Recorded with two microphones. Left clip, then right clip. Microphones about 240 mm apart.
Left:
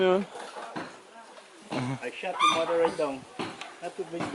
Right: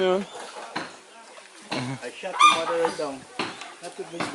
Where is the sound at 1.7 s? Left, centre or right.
Centre.